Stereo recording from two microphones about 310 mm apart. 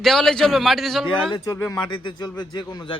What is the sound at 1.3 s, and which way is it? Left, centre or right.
Speech, centre.